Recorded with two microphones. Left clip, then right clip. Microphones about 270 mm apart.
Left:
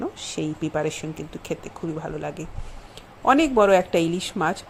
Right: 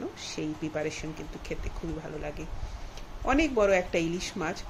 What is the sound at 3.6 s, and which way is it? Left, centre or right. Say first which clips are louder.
Speech: left 7 dB; left.